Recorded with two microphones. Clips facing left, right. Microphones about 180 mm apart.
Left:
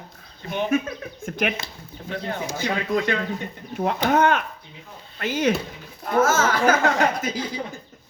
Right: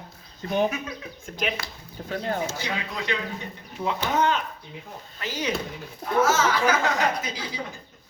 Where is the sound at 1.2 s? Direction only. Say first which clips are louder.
Left 4 dB; 55° left (ahead or behind).